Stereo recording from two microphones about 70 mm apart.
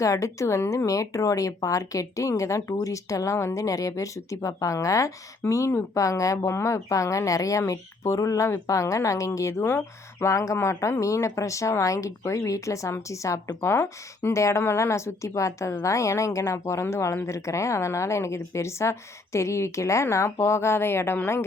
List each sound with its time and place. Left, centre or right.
0.0 s speech: left
0.9 s speech: left
10.3 s speech: left